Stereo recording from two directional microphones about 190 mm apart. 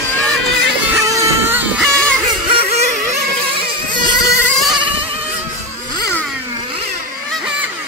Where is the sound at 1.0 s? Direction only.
15° right (ahead or behind).